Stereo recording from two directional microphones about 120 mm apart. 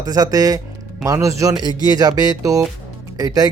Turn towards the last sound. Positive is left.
turn(degrees=-30)  # may be behind; listen again after turning